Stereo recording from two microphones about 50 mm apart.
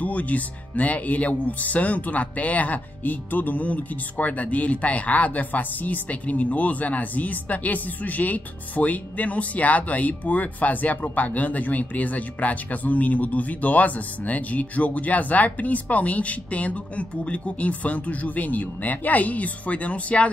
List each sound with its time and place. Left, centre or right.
0.0 s speech: left